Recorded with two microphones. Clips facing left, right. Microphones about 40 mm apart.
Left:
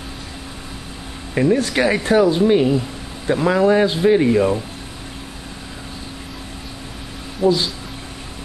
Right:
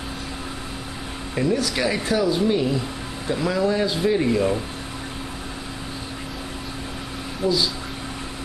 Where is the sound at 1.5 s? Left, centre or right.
Left; by 4.6 s centre.